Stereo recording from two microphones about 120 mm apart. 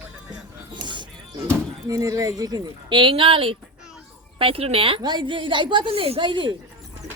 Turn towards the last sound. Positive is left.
turn(degrees=-40)  # may be behind; listen again after turning